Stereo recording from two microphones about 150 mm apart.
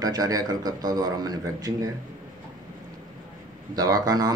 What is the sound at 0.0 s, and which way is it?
A man's voice, 25° right (ahead or behind).